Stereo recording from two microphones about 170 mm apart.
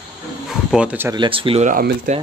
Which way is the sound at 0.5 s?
5° right (ahead or behind).